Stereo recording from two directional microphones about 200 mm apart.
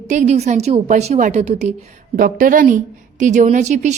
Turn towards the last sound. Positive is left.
turn(degrees=-35)  # may be behind; listen again after turning